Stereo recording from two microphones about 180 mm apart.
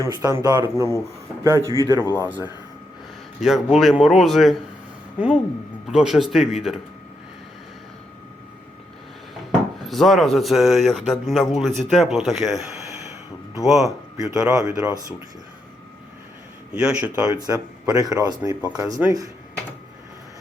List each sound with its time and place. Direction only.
0.0 s speech: 20° right (ahead or behind)
1.6 s speech: 20° left (ahead or behind)
3.4 s speech: centre (ahead or behind)
5.9 s speech: 5° right (ahead or behind)
9.5 s speech: centre (ahead or behind)
13.7 s speech: centre (ahead or behind)
14.3 s speech: 15° right (ahead or behind)
16.7 s speech: 5° right (ahead or behind)
17.2 s speech: 20° right (ahead or behind)